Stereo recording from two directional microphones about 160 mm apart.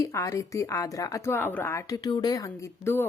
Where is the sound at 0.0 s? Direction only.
20° left (ahead or behind).